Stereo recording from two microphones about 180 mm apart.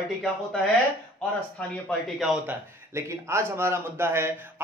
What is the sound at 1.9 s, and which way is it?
Speech, centre (ahead or behind).